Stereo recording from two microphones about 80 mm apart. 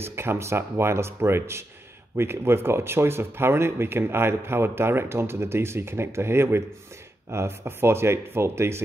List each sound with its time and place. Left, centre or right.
0.0 s speech: right